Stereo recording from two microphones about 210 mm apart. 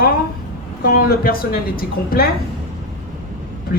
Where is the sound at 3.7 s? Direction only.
45° left (ahead or behind).